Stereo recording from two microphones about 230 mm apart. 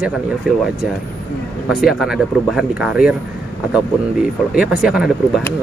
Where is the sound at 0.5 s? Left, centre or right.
Centre.